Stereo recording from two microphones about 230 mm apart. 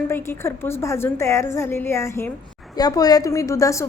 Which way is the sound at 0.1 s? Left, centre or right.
Centre.